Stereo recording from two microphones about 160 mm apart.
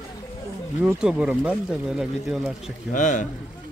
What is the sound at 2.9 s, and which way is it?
Speech, 50° left (ahead or behind).